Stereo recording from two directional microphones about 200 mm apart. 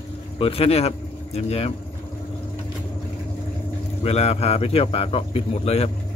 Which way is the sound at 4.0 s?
30° left (ahead or behind).